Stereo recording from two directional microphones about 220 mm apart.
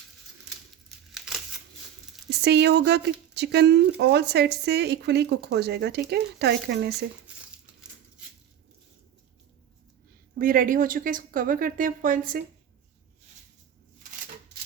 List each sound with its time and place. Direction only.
1.1 s crumpling: centre (ahead or behind)
2.4 s speech: 50° right (ahead or behind)
10.3 s a woman's voice: 40° right (ahead or behind)